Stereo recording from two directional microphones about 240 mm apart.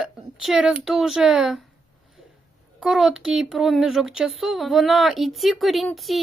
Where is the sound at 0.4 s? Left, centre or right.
Centre.